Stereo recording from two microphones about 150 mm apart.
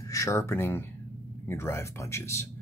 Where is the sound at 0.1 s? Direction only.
20° left (ahead or behind).